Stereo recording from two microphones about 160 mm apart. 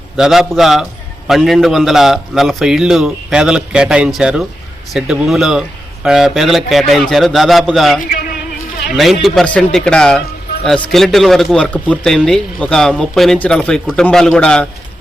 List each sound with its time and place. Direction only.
0.2 s a man's voice: centre (ahead or behind)
8.1 s music: 70° left (ahead or behind)
9.2 s a man's voice: 5° left (ahead or behind)